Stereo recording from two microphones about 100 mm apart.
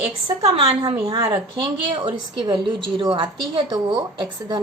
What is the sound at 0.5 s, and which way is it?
Speech, 70° right (ahead or behind).